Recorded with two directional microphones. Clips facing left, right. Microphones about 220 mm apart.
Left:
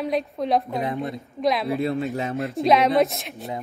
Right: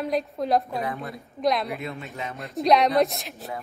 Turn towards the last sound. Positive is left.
turn(degrees=0)  # may be behind; listen again after turning